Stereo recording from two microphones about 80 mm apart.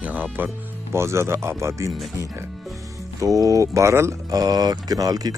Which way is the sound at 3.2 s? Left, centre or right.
Right.